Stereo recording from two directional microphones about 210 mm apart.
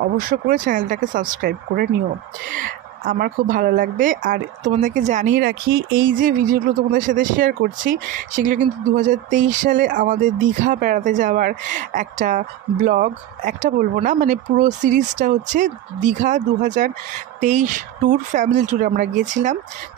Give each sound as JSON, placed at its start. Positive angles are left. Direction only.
{"t": 0.0, "sound": "a woman's voice", "side_deg": -45}